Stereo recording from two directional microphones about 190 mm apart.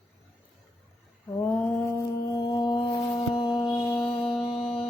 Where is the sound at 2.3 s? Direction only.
20° left (ahead or behind).